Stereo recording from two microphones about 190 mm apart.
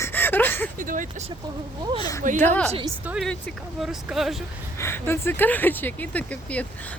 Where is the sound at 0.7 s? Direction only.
45° right (ahead or behind).